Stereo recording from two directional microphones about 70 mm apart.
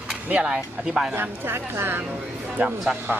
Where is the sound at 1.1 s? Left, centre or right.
Right.